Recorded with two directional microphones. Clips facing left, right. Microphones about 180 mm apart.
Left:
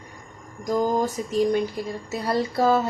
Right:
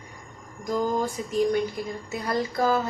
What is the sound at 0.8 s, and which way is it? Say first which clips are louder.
A woman's voice: left 3 dB; 40° left (ahead or behind).